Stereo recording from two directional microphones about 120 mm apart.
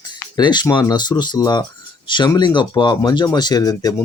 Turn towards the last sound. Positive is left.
turn(degrees=30)  # may be behind; listen again after turning